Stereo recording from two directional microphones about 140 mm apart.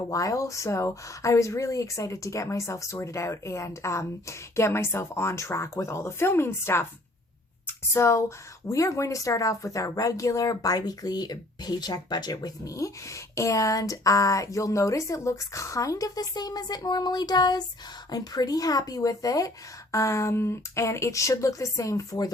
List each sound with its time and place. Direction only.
0.1 s speech: 25° left (ahead or behind)